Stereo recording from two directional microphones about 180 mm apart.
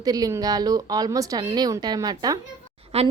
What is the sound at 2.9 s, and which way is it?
Speech, 35° right (ahead or behind).